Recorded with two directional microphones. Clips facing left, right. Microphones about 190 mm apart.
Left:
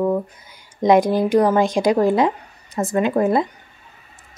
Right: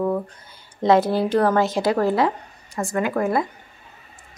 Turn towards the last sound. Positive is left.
turn(degrees=20)  # may be behind; listen again after turning